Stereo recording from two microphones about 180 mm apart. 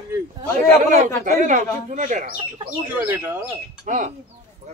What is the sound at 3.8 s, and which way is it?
Speech, 45° right (ahead or behind).